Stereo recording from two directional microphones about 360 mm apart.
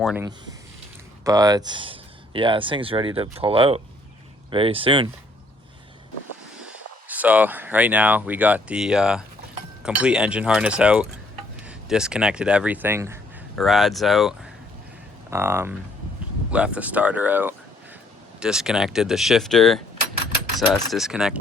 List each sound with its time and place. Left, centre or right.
0.0 s speech: centre
6.6 s speech: centre